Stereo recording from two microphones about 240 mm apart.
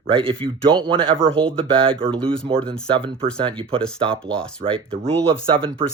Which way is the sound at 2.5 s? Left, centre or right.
Centre.